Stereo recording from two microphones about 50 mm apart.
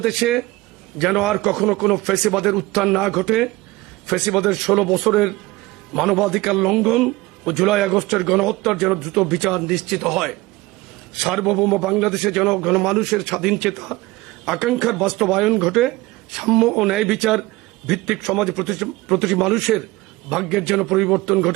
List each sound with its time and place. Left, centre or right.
0.0 s a man's voice: centre